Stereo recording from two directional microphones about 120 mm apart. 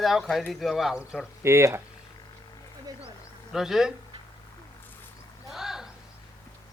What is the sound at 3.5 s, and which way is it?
Speech, 5° right (ahead or behind).